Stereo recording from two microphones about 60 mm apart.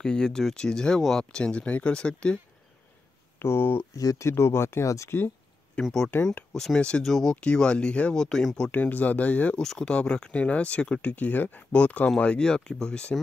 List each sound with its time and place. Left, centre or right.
0.0 s speech: centre
3.3 s speech: left
3.9 s speech: left
4.3 s speech: left
5.8 s speech: centre
6.1 s speech: left
6.5 s speech: centre
7.3 s speech: centre
8.7 s speech: left
9.6 s speech: centre